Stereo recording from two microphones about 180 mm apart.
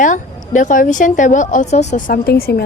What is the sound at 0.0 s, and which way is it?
A woman's voice, 45° left (ahead or behind).